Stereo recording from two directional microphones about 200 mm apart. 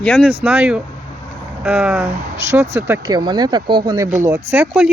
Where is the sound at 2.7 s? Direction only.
20° right (ahead or behind).